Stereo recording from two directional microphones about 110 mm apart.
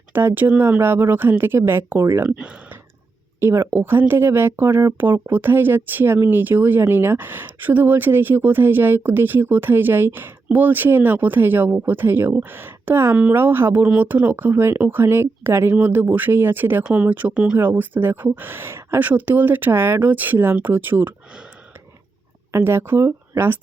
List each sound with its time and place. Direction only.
0.1 s speech: 20° right (ahead or behind)
2.3 s speech: 10° right (ahead or behind)
3.4 s speech: 25° right (ahead or behind)
22.5 s speech: 20° right (ahead or behind)